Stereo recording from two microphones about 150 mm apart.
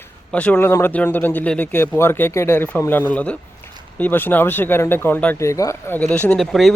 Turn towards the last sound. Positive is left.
turn(degrees=0)  # may be behind; listen again after turning